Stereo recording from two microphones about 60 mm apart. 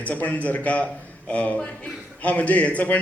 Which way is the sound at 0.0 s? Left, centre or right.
Left.